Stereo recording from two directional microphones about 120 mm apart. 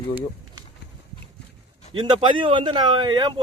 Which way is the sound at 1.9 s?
40° right (ahead or behind).